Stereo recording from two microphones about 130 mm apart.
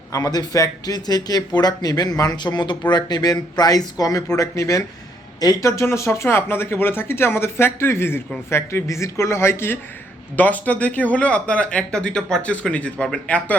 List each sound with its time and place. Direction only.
0.1 s speech: 30° left (ahead or behind); by 13.6 s 10° left (ahead or behind)